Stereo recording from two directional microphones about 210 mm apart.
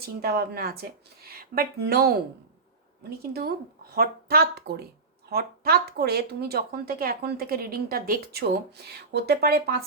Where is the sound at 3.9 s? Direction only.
45° right (ahead or behind).